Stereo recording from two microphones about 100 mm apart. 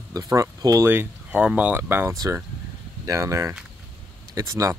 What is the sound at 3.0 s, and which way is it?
Speech, 35° right (ahead or behind).